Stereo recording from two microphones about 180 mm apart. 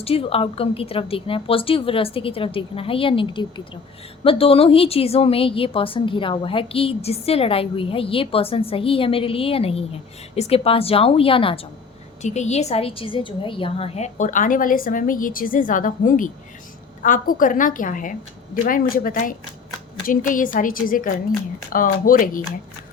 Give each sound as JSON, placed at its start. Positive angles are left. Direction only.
{"t": 0.0, "sound": "a woman's voice", "side_deg": 30}